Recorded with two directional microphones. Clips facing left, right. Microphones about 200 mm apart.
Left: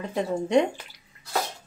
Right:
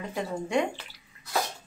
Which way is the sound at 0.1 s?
20° left (ahead or behind).